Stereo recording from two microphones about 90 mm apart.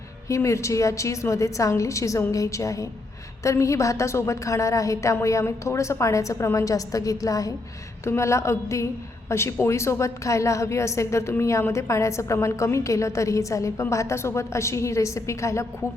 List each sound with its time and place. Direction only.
0.3 s a woman's voice: 35° left (ahead or behind)